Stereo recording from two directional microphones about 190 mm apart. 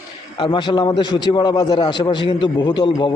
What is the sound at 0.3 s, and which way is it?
A man's voice, 25° left (ahead or behind).